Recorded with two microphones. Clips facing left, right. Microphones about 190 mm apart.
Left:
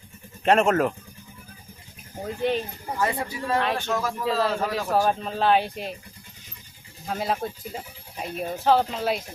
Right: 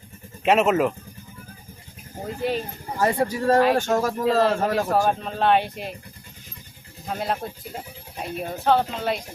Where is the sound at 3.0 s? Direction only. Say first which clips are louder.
Right 6 dB; 40° right (ahead or behind).